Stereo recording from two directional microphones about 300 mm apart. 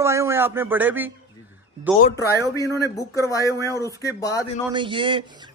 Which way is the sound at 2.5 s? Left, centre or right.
Centre.